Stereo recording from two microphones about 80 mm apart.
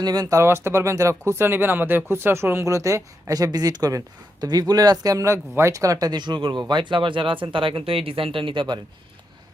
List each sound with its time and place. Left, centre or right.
0.0 s speech: right
0.3 s speech: right